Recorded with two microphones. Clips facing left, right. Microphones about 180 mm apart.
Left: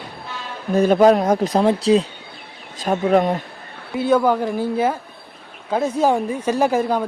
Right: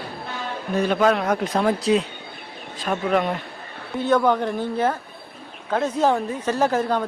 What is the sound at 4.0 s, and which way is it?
A woman's voice, 10° left (ahead or behind).